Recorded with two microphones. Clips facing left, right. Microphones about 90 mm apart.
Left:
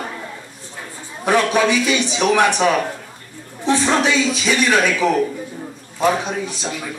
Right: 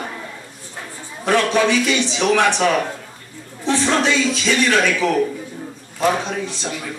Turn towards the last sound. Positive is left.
turn(degrees=15)  # may be behind; listen again after turning